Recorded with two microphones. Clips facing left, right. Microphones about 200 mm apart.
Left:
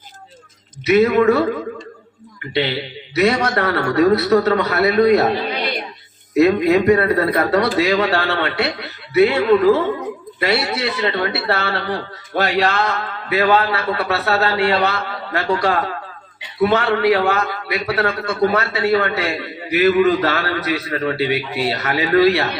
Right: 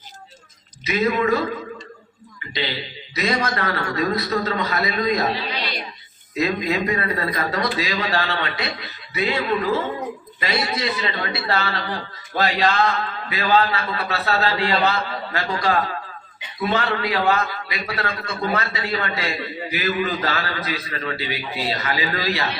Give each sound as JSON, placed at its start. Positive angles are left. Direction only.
{"t": 0.9, "sound": "a man's voice", "side_deg": 65}
{"t": 10.4, "sound": "a man's voice", "side_deg": 65}